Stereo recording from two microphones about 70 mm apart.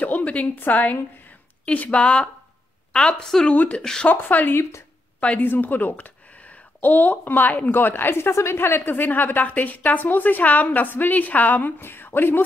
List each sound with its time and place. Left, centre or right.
0.0 s a woman's voice: left
3.5 s speech: left
3.8 s a woman's voice: centre
4.1 s speech: left